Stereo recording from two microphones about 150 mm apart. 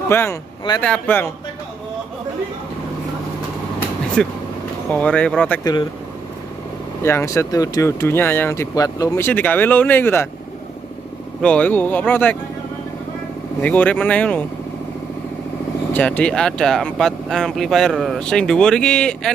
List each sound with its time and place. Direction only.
0.1 s speech: 15° left (ahead or behind)
4.2 s speech: 5° left (ahead or behind)
5.6 s speech: 25° left (ahead or behind)
7.0 s speech: 15° left (ahead or behind)
11.4 s speech: 10° left (ahead or behind)
13.6 s speech: 10° left (ahead or behind)
15.9 s speech: 10° left (ahead or behind)